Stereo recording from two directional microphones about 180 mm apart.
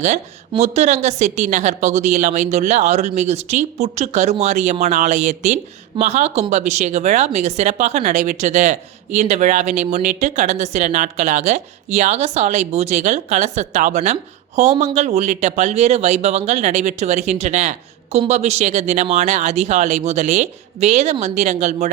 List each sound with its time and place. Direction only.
0.6 s speech: 40° right (ahead or behind)